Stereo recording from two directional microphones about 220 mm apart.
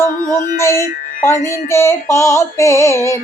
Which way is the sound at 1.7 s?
10° left (ahead or behind).